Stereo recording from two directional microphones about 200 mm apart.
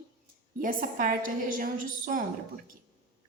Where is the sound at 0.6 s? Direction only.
45° right (ahead or behind).